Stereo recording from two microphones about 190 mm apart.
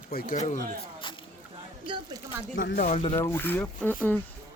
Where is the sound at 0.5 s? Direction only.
25° left (ahead or behind).